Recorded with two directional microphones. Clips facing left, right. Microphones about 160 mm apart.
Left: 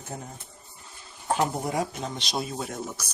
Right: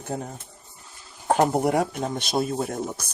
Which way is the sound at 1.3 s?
60° right (ahead or behind).